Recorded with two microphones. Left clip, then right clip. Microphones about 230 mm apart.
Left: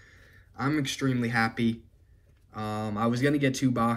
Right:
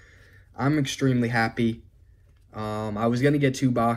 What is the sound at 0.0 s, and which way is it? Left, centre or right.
Speech, centre.